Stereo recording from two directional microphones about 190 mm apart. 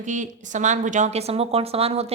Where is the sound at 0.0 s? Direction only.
40° right (ahead or behind).